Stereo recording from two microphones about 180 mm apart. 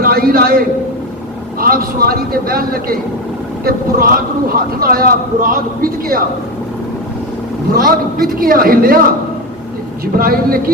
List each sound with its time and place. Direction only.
0.0 s a man's voice: 55° right (ahead or behind)
7.7 s a man's voice: 55° right (ahead or behind)
10.2 s a man's voice: 55° right (ahead or behind)